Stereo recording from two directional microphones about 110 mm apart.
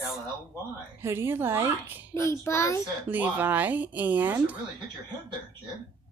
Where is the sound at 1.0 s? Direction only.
20° right (ahead or behind).